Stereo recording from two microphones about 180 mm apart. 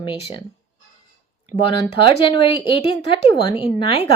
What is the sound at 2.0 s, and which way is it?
Speech, 30° left (ahead or behind).